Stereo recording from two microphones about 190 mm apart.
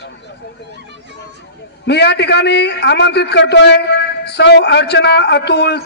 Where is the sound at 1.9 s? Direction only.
65° left (ahead or behind).